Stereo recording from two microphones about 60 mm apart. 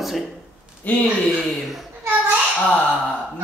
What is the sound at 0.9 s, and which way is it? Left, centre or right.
Speech, left.